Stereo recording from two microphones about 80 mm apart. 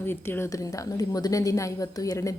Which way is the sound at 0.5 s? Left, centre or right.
Left.